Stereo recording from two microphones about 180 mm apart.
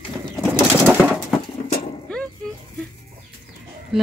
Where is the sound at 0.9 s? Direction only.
5° right (ahead or behind).